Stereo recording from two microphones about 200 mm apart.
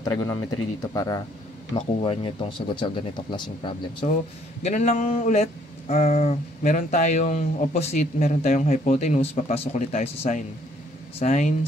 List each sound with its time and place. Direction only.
0.0 s speech: 20° left (ahead or behind)
4.6 s speech: 35° left (ahead or behind)